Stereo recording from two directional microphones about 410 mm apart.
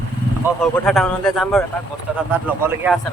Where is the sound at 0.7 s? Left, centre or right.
Centre.